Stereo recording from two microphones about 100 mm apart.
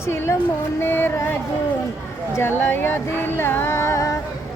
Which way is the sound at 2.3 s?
25° left (ahead or behind).